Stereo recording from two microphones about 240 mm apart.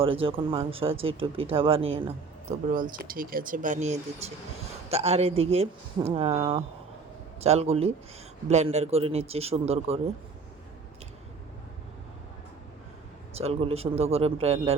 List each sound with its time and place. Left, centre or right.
0.0 s speech: right
7.4 s speech: right
13.4 s speech: right